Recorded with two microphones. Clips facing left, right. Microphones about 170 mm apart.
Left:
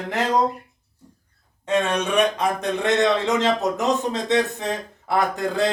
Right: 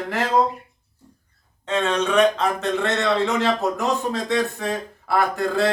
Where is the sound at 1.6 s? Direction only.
10° left (ahead or behind).